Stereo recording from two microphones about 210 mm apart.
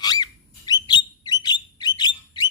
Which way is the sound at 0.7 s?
20° left (ahead or behind).